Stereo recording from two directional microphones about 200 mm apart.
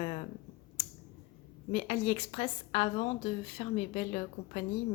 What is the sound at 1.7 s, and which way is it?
A woman's voice, 30° left (ahead or behind).